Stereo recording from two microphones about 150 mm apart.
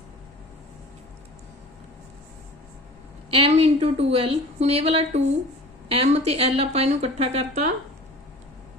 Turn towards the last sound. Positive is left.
turn(degrees=-45)  # may be behind; listen again after turning